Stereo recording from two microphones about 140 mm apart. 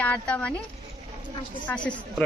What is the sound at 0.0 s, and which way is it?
Speech, 10° left (ahead or behind).